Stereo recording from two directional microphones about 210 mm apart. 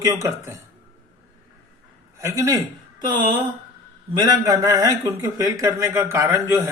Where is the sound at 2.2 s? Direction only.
15° right (ahead or behind).